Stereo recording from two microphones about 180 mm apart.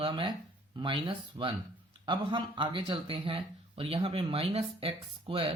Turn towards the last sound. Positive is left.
turn(degrees=-30)  # may be behind; listen again after turning